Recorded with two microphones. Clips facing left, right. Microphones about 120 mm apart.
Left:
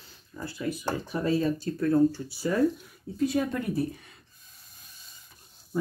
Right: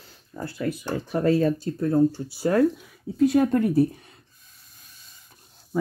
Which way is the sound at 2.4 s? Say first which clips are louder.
Right 5 dB; 60° right (ahead or behind).